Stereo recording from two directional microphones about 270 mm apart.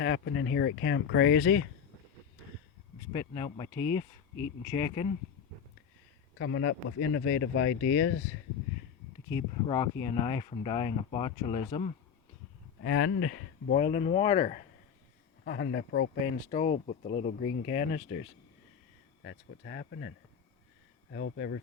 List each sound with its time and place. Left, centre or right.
0.0 s speech: left
3.1 s speech: centre
6.4 s speech: left
9.3 s speech: centre
12.8 s speech: left
13.7 s speech: left
15.4 s speech: left
16.5 s speech: left
19.2 s speech: left